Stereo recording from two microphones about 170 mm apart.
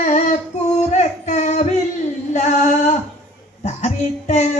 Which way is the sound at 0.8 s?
45° left (ahead or behind).